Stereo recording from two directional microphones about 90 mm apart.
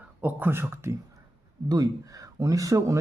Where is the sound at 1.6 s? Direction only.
45° right (ahead or behind).